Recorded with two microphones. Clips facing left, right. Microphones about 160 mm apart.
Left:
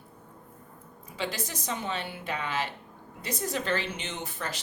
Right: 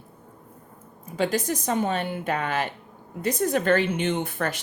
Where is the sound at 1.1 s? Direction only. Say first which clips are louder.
Right 10 dB; 50° right (ahead or behind).